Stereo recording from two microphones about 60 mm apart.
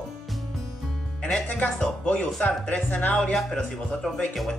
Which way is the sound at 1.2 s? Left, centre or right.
Left.